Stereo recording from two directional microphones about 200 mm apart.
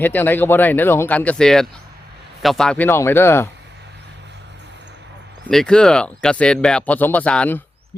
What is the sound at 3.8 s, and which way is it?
Vehicle, 60° right (ahead or behind).